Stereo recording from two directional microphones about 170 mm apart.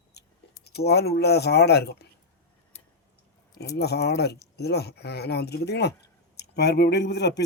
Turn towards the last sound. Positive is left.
turn(degrees=80)